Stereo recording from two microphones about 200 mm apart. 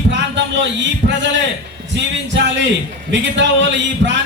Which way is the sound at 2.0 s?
60° right (ahead or behind).